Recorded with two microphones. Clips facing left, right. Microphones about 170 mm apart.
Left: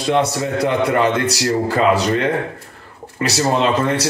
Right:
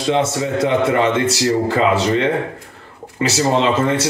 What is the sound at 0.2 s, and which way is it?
Speech, 25° right (ahead or behind).